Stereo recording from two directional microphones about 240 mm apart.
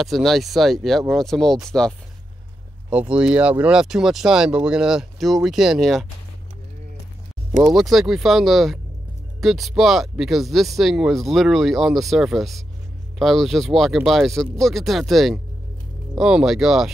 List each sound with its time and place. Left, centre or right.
0.0 s speech: centre
7.6 s speech: centre